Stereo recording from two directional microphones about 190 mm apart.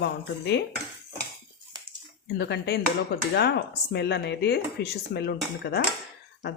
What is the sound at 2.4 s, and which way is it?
Speech, 60° left (ahead or behind).